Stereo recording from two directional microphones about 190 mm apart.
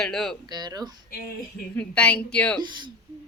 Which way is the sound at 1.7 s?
5° left (ahead or behind).